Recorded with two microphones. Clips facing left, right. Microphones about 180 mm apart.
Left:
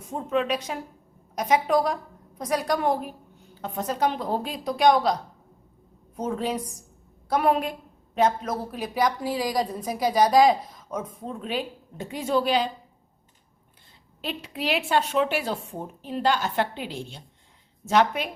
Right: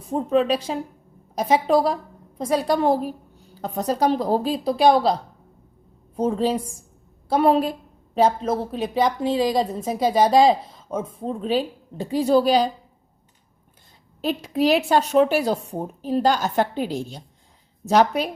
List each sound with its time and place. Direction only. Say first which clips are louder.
0.0 s a woman's voice: right 6 dB; 35° right (ahead or behind)
14.2 s speech: right 10 dB; 40° right (ahead or behind)